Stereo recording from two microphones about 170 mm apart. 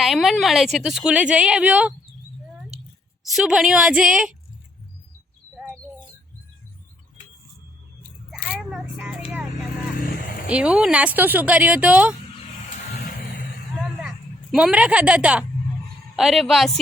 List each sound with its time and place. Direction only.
0.0 s a woman's voice: centre (ahead or behind)
3.2 s a woman's voice: centre (ahead or behind)
5.5 s bird: 5° right (ahead or behind)
8.4 s a sound: 5° right (ahead or behind)
10.1 s vehicle: 55° left (ahead or behind)
10.4 s speech: 5° right (ahead or behind)
14.5 s a woman's voice: 5° right (ahead or behind)